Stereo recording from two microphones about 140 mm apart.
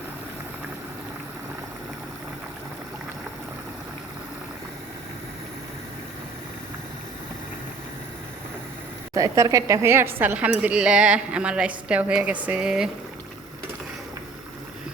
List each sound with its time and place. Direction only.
9.1 s a woman's voice: 25° right (ahead or behind); by 12.9 s 5° right (ahead or behind)